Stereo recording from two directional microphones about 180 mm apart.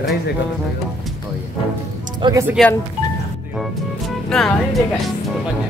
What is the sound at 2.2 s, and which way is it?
Speech, 25° right (ahead or behind).